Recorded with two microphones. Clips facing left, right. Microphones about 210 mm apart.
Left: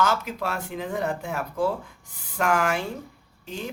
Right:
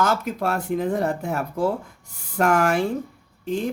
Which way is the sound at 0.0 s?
45° right (ahead or behind).